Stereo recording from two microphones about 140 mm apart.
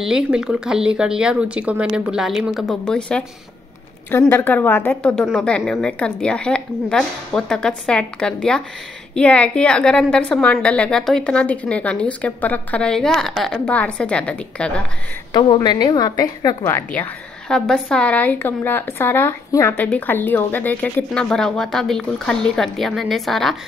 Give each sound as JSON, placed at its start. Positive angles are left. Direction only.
{"t": 0.0, "sound": "a woman's voice", "side_deg": -5}
{"t": 4.3, "sound": "a woman's voice", "side_deg": 15}
{"t": 15.3, "sound": "a woman's voice", "side_deg": 30}